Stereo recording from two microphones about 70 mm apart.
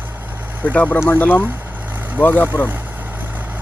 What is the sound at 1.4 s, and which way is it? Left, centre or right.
Vehicle, right.